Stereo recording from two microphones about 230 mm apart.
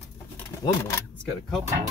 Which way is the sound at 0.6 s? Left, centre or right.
Centre.